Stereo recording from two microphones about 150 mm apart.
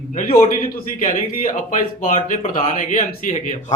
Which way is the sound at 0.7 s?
60° left (ahead or behind).